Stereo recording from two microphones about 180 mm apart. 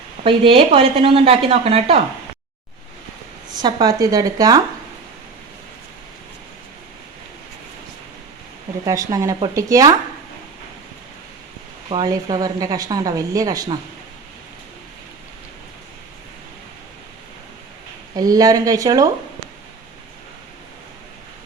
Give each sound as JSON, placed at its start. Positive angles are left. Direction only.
{"t": 0.3, "sound": "speech", "side_deg": -30}
{"t": 3.5, "sound": "speech", "side_deg": -25}
{"t": 8.8, "sound": "speech", "side_deg": -20}
{"t": 11.9, "sound": "speech", "side_deg": -20}
{"t": 18.2, "sound": "speech", "side_deg": -20}